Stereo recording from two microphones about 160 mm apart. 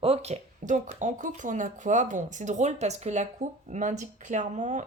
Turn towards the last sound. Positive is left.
turn(degrees=-50)  # may be behind; listen again after turning